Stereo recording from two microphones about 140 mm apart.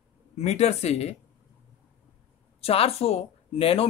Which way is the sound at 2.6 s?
45° left (ahead or behind).